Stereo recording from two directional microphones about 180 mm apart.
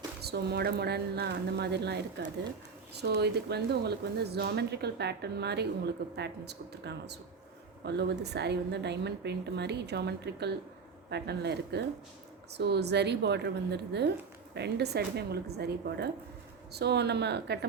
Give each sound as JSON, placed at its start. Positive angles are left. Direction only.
{"t": 0.2, "sound": "a woman's voice", "side_deg": -65}